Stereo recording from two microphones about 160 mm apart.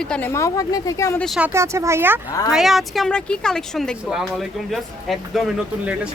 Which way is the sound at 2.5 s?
Centre (ahead or behind).